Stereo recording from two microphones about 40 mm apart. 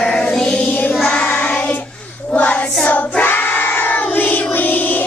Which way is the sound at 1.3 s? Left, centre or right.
Left.